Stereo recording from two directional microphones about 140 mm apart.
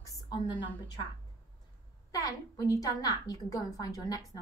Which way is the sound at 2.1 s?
25° left (ahead or behind).